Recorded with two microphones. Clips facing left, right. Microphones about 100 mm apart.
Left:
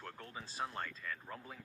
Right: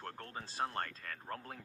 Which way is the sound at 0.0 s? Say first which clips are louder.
Right 3 dB; 50° right (ahead or behind).